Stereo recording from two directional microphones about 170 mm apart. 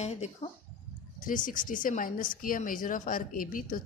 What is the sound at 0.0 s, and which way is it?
Speech, 40° left (ahead or behind).